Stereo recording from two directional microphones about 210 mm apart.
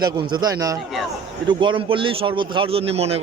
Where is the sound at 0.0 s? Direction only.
20° right (ahead or behind).